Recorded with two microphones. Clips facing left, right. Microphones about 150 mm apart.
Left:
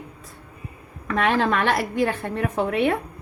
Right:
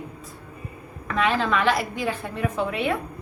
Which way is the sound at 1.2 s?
55° left (ahead or behind).